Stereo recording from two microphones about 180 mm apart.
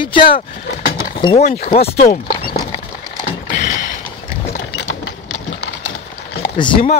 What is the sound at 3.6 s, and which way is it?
Mechanisms, 45° left (ahead or behind).